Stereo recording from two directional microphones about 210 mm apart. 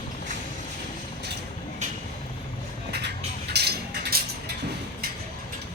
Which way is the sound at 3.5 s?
50° right (ahead or behind).